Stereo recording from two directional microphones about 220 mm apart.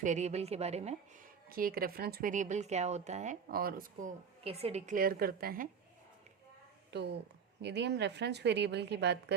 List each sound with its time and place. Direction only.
0.0 s a woman's voice: 30° right (ahead or behind)
1.5 s speech: 40° right (ahead or behind)
4.4 s speech: 25° right (ahead or behind); by 5.6 s 45° right (ahead or behind)
6.9 s a woman's voice: 50° right (ahead or behind)